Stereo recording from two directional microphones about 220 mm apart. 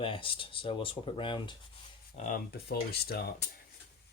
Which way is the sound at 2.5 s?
45° left (ahead or behind).